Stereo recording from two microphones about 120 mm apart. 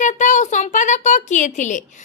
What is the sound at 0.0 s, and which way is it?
A woman's voice, 90° left.